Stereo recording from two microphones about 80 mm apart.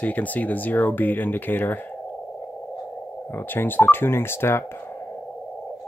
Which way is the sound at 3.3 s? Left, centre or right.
Left.